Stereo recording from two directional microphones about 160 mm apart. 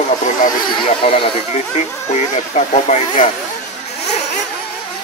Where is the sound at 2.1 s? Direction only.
45° left (ahead or behind).